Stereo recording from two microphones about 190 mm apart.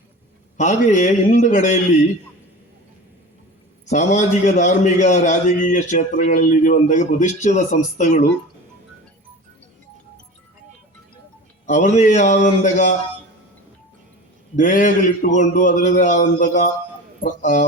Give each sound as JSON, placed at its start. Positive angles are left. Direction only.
{"t": 0.5, "sound": "a man's voice", "side_deg": 40}
{"t": 3.8, "sound": "a man's voice", "side_deg": 40}
{"t": 11.6, "sound": "a man's voice", "side_deg": 40}
{"t": 14.5, "sound": "a man's voice", "side_deg": 45}